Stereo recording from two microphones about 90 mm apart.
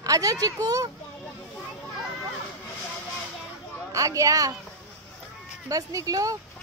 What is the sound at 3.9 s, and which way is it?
Speech, 40° right (ahead or behind).